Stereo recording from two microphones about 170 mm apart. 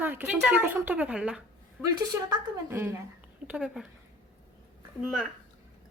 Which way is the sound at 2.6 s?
15° right (ahead or behind).